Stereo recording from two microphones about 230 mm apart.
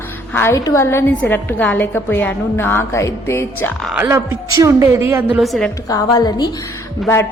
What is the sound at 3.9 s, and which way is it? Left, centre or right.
A woman's voice, centre.